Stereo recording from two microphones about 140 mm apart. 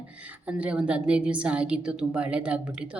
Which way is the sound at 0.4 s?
10° right (ahead or behind).